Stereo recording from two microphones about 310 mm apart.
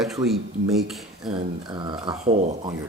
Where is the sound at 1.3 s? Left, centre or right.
Centre.